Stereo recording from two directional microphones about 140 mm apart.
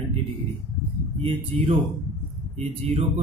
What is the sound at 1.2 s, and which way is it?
A man's voice, 40° right (ahead or behind).